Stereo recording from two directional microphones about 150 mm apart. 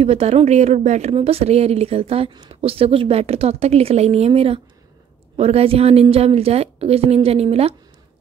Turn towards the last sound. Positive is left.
turn(degrees=-40)  # may be behind; listen again after turning